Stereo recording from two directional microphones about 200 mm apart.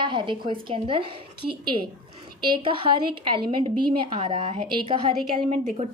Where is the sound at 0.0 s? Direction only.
25° right (ahead or behind).